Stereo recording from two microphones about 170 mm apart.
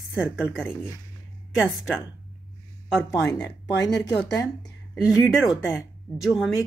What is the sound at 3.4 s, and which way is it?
Speech, 20° left (ahead or behind).